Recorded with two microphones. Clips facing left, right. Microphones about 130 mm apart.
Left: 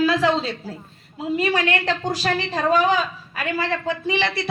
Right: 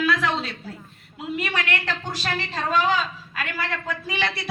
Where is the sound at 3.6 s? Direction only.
25° left (ahead or behind).